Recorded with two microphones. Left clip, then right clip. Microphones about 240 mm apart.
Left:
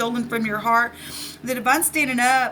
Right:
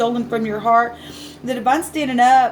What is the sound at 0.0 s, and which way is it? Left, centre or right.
Speech, left.